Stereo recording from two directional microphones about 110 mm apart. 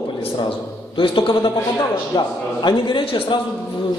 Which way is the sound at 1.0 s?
45° left (ahead or behind).